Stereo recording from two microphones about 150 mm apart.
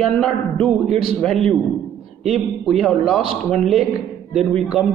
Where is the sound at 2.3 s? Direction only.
Centre (ahead or behind).